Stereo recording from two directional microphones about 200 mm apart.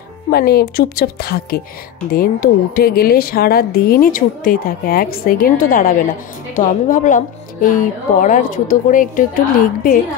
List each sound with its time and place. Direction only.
0.3 s speech: 50° left (ahead or behind)